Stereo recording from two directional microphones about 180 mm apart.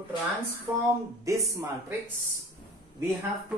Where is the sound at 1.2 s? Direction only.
15° right (ahead or behind).